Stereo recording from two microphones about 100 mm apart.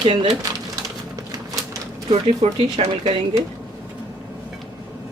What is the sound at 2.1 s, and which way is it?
Speech, 85° right.